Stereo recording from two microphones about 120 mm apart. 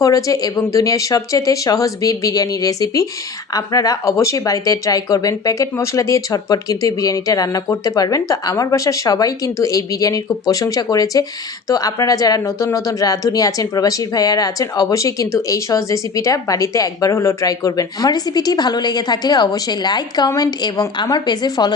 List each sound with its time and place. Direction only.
0.0 s a woman's voice: 30° left (ahead or behind)